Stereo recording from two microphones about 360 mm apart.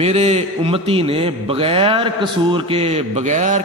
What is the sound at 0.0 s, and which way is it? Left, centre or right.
A man's voice, centre.